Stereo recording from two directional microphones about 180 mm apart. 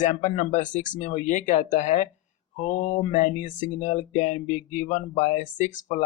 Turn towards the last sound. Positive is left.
turn(degrees=45)  # may be behind; listen again after turning